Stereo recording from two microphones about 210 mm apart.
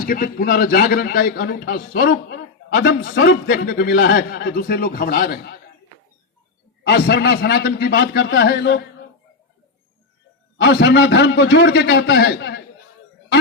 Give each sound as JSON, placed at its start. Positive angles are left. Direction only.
{"t": 0.0, "sound": "a man's voice", "side_deg": 40}
{"t": 6.8, "sound": "a man's voice", "side_deg": 50}
{"t": 10.6, "sound": "a man's voice", "side_deg": 55}